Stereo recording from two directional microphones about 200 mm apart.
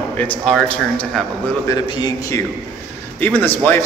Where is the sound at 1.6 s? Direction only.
20° left (ahead or behind).